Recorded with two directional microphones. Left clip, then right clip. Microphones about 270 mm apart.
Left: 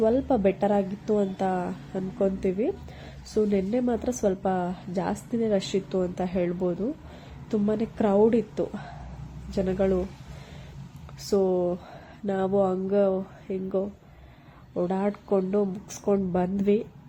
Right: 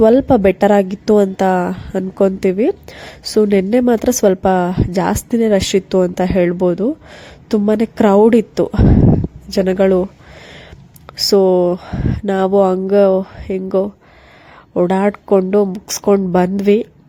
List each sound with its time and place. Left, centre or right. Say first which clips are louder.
0.0 s a woman's voice: right 13 dB; right